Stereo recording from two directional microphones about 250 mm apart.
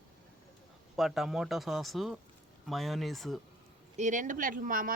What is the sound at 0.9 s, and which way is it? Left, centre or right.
Speech, centre.